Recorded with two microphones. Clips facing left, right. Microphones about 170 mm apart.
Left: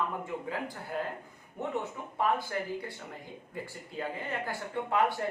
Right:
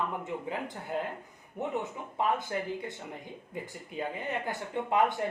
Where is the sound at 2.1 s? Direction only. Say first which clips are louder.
Even; 20° right (ahead or behind).